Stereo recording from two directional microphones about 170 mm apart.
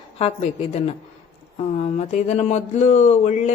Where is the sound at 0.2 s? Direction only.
35° left (ahead or behind).